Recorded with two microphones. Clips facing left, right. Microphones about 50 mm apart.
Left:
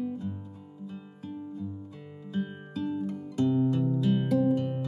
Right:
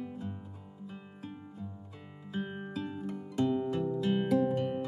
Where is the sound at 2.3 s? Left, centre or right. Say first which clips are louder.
Left 3 dB; centre.